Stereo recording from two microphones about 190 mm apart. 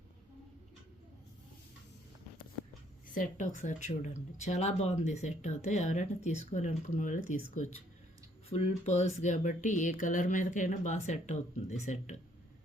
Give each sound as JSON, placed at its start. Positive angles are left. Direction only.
{"t": 3.2, "sound": "speech", "side_deg": 40}